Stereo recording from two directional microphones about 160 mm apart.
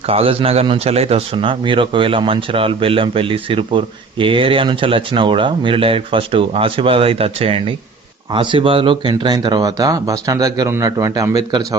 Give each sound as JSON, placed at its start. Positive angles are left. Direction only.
{"t": 0.1, "sound": "a man's voice", "side_deg": -35}